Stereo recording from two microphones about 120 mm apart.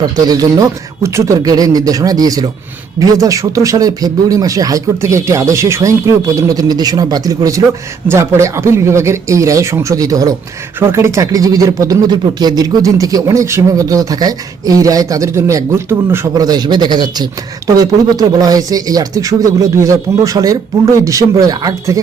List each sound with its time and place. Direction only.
0.0 s a man's voice: 30° right (ahead or behind)
16.3 s a man's voice: 35° right (ahead or behind)